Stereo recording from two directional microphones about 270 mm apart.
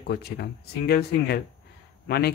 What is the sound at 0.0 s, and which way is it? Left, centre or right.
Speech, left.